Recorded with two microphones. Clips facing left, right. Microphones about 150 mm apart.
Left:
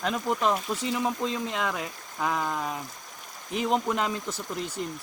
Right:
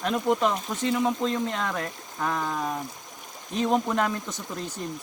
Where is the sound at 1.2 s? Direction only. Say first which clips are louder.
Right 2 dB; 10° left (ahead or behind).